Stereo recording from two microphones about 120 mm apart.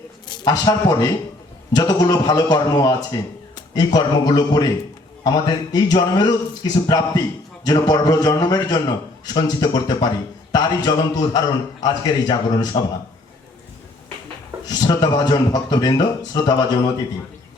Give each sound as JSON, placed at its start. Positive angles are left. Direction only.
{"t": 0.3, "sound": "a man's voice", "side_deg": 35}
{"t": 14.7, "sound": "a man's voice", "side_deg": 35}